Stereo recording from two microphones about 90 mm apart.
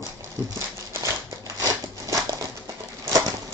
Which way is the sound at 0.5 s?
35° right (ahead or behind).